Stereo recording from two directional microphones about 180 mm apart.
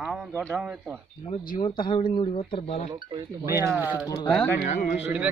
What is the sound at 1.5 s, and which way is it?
Speech, 25° left (ahead or behind).